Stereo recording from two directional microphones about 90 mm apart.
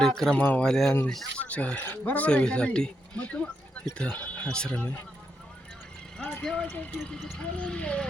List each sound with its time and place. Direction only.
0.0 s speech: 5° left (ahead or behind)
1.4 s speech: 15° left (ahead or behind)
6.4 s speech: 5° left (ahead or behind)